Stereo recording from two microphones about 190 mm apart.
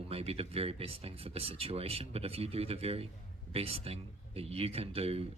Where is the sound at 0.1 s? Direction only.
30° right (ahead or behind).